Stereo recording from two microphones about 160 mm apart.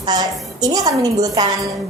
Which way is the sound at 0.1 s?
25° right (ahead or behind).